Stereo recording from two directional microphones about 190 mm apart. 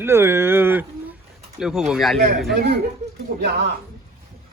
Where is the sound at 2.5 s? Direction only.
60° right (ahead or behind).